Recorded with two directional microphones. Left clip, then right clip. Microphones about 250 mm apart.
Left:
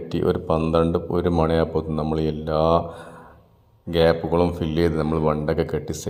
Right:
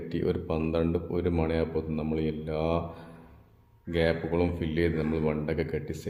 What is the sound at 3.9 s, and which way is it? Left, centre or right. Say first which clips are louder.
A man's voice: left 9 dB; centre.